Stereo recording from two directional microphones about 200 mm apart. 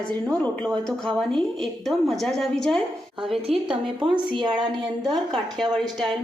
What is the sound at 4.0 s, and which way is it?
Speech, 25° right (ahead or behind).